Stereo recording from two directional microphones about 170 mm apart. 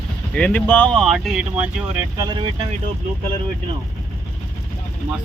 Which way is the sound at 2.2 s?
25° right (ahead or behind).